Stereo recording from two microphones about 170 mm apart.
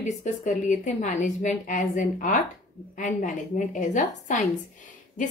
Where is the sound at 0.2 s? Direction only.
45° left (ahead or behind).